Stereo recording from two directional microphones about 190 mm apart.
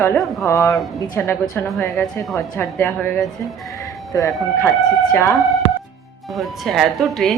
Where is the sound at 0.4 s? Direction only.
15° left (ahead or behind).